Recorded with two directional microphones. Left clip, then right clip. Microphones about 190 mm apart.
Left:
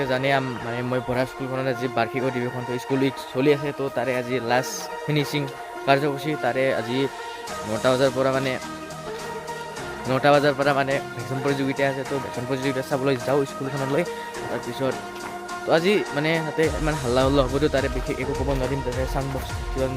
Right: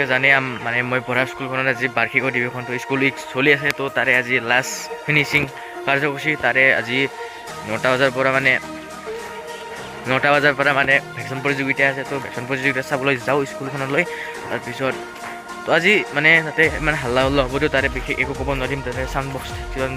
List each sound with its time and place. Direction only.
0.0 s speech: 5° left (ahead or behind)
10.1 s speech: centre (ahead or behind)
15.7 s speech: centre (ahead or behind)